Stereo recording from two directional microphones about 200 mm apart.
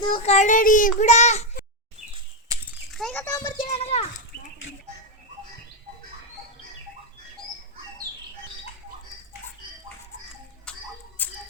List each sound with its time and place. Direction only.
0.0 s a child's voice: 25° left (ahead or behind)
2.5 s a sound: 15° right (ahead or behind)
2.9 s a child's voice: 5° left (ahead or behind)
3.2 s speech: 20° left (ahead or behind)
3.7 s a child's voice: 30° left (ahead or behind)
10.7 s a sound: 5° left (ahead or behind)
11.2 s music: 10° left (ahead or behind)